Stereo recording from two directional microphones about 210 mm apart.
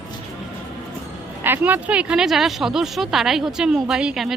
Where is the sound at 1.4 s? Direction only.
10° right (ahead or behind).